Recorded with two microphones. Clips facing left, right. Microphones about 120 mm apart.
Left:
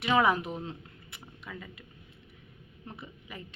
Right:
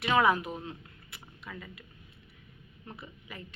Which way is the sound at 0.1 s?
20° left (ahead or behind).